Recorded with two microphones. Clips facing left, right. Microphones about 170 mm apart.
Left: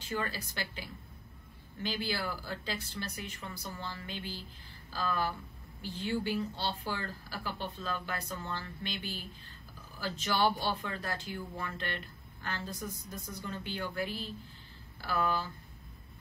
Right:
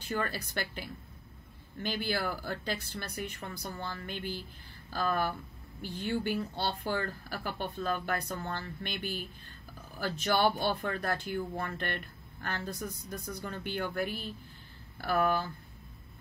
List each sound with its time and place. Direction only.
0.2 s a woman's voice: 55° right (ahead or behind)